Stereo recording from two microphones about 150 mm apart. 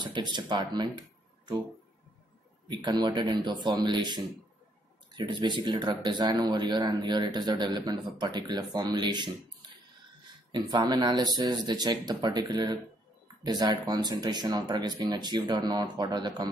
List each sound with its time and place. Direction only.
0.0 s speech: 30° right (ahead or behind)
2.7 s speech: 30° right (ahead or behind)